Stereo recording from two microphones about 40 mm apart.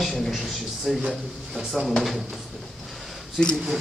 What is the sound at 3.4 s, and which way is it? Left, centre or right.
Speech, centre.